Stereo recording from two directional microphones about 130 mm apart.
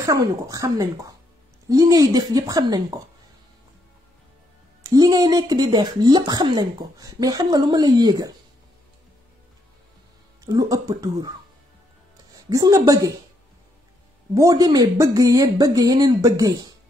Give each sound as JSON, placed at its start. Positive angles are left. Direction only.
{"t": 0.0, "sound": "speech", "side_deg": -25}
{"t": 4.8, "sound": "speech", "side_deg": -30}
{"t": 10.4, "sound": "speech", "side_deg": -30}
{"t": 12.4, "sound": "speech", "side_deg": -30}
{"t": 14.3, "sound": "speech", "side_deg": -25}